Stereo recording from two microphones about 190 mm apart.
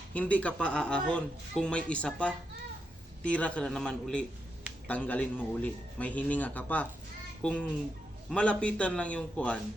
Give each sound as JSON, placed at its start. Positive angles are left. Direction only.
{"t": 0.1, "sound": "a man's voice", "side_deg": 5}